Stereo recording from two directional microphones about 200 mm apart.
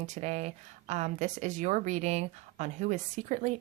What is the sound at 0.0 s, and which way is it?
Speech, 35° right (ahead or behind).